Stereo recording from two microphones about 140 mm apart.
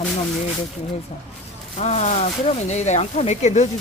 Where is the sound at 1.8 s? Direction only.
55° left (ahead or behind).